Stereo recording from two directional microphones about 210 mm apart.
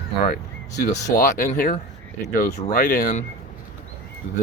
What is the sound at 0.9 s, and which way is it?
Speech, 35° left (ahead or behind).